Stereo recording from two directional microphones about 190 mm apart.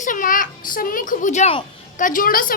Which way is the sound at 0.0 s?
45° left (ahead or behind).